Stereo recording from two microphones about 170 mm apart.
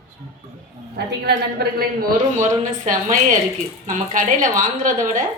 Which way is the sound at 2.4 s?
45° right (ahead or behind).